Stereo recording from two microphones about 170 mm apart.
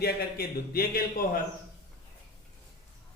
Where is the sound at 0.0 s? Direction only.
65° left (ahead or behind).